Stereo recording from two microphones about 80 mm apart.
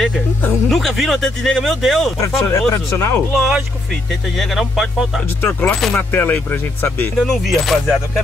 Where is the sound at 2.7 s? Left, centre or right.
Left.